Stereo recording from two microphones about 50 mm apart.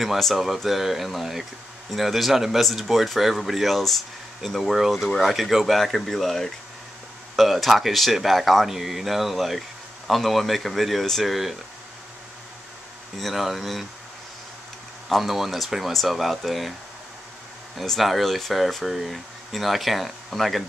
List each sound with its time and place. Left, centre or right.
0.0 s speech: centre
13.2 s speech: centre
15.0 s speech: centre
17.7 s speech: centre